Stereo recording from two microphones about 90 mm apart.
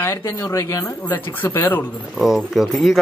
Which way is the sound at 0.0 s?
25° left (ahead or behind).